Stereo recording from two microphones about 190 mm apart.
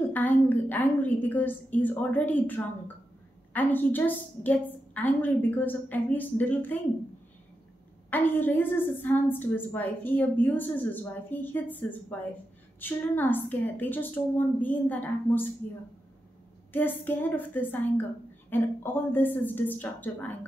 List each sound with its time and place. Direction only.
0.1 s a woman's voice: 10° left (ahead or behind)
8.1 s a woman's voice: 10° left (ahead or behind)
16.7 s a woman's voice: 10° left (ahead or behind)